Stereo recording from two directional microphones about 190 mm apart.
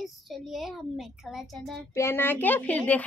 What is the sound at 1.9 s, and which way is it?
A woman's voice, 15° left (ahead or behind).